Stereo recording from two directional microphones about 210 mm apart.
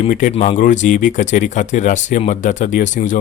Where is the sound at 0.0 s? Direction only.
35° left (ahead or behind).